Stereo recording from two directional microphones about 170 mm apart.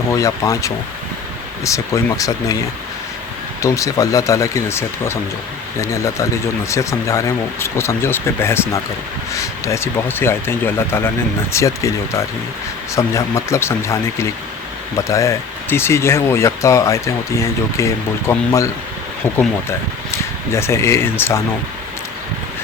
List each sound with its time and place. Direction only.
0.1 s speech: 20° left (ahead or behind)
3.6 s speech: 20° left (ahead or behind)